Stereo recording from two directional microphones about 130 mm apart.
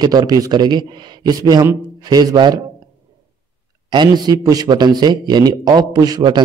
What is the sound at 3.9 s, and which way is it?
Speech, 35° right (ahead or behind).